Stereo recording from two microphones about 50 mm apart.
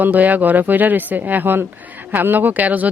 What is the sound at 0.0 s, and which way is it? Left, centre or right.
Speech, right.